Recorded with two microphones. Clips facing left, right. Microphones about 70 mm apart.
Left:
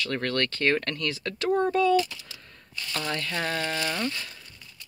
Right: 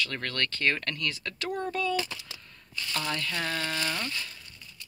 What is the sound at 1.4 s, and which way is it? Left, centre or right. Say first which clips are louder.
Speech: left 8 dB; left.